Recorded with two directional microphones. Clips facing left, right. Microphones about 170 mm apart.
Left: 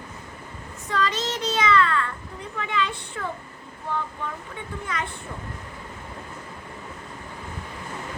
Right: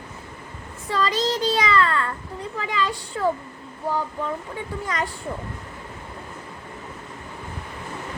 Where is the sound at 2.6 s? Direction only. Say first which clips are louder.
Right 1 dB; 30° right (ahead or behind).